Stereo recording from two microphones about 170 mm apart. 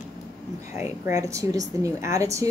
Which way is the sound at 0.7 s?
15° right (ahead or behind).